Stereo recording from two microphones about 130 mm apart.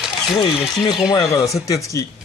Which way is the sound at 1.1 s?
30° left (ahead or behind).